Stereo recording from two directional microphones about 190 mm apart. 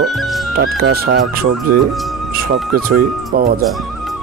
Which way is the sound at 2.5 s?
50° right (ahead or behind).